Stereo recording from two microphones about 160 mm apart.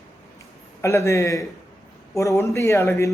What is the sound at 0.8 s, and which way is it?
A man's voice, 20° left (ahead or behind).